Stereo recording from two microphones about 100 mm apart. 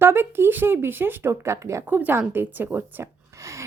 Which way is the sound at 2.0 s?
20° right (ahead or behind).